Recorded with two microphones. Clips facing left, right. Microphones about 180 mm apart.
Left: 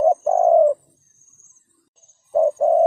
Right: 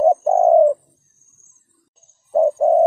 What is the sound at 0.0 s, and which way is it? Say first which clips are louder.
Bird: right 2 dB; 30° right (ahead or behind).